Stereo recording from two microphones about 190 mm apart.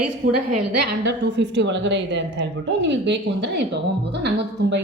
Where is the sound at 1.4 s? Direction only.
70° right (ahead or behind).